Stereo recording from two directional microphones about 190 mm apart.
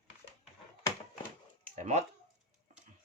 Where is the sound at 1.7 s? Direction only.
35° right (ahead or behind).